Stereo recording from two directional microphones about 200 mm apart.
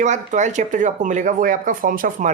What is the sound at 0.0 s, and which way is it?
Speech, 35° right (ahead or behind).